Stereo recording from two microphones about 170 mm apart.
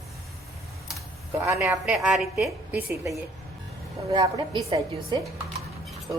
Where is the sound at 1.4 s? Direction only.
15° right (ahead or behind).